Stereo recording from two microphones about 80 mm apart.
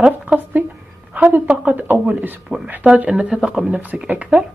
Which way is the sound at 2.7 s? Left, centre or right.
Centre.